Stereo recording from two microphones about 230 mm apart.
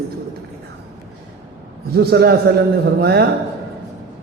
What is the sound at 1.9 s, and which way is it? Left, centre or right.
A man's voice, right.